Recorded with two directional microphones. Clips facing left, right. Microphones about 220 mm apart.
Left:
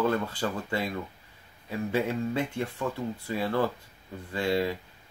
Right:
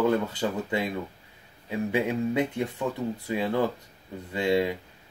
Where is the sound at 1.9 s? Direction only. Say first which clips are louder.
Right 2 dB; 20° right (ahead or behind).